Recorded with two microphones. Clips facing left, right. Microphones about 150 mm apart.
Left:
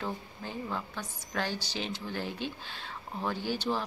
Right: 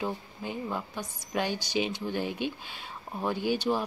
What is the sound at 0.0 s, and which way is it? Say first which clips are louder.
Speech: right 3 dB; 15° right (ahead or behind).